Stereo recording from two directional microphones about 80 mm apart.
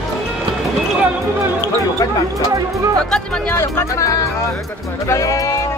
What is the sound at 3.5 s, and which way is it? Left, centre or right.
Speech, left.